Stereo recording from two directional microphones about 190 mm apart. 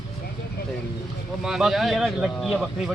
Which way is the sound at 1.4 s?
Centre (ahead or behind).